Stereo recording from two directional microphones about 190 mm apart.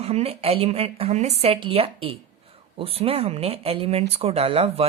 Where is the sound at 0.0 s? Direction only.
30° right (ahead or behind).